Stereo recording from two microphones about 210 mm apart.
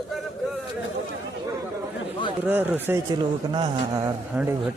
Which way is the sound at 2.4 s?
10° right (ahead or behind).